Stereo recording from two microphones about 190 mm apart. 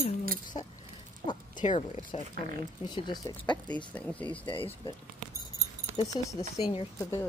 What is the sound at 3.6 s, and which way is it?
Speech, 5° left (ahead or behind).